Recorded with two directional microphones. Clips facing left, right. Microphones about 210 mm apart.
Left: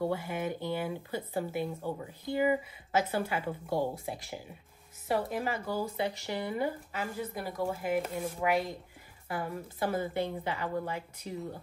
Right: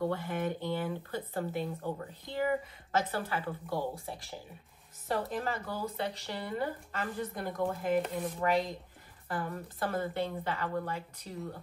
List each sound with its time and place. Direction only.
0.1 s speech: 10° left (ahead or behind)